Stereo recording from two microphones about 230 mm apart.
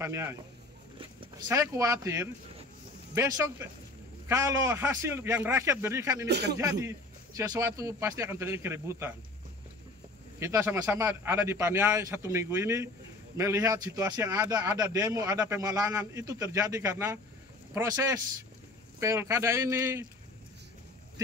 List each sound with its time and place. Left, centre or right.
0.0 s a man's voice: centre
6.2 s speech: right
6.5 s a man's voice: centre
10.4 s a man's voice: centre